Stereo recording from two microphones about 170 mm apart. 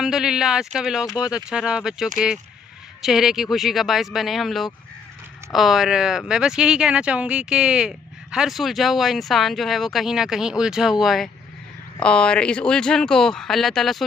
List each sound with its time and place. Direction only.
0.0 s speech: 5° right (ahead or behind)
1.0 s speech: 20° left (ahead or behind)
1.5 s speech: 5° right (ahead or behind)